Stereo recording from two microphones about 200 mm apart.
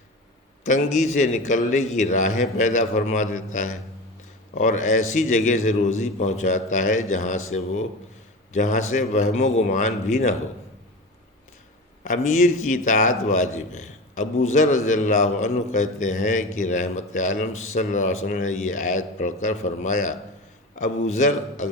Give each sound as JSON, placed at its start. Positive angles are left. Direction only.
{"t": 0.6, "sound": "a man's voice", "side_deg": 40}
{"t": 12.0, "sound": "a man's voice", "side_deg": 40}